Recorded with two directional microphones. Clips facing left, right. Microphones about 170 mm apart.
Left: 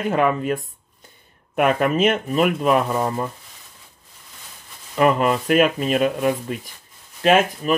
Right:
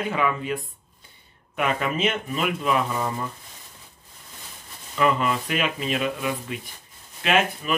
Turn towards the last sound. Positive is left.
turn(degrees=40)  # may be behind; listen again after turning